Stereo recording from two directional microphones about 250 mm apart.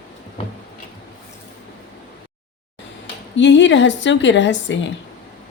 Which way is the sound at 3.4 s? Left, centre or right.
Left.